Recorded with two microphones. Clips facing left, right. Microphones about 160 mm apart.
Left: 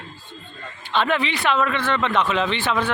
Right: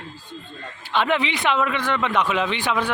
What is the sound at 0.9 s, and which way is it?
Speech, 15° right (ahead or behind).